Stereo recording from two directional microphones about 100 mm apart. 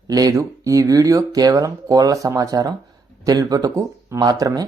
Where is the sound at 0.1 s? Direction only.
35° right (ahead or behind).